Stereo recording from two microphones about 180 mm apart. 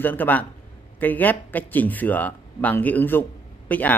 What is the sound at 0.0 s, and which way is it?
A man's voice, 10° left (ahead or behind).